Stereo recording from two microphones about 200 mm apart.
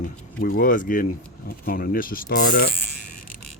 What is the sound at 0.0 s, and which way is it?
Speech, 45° left (ahead or behind).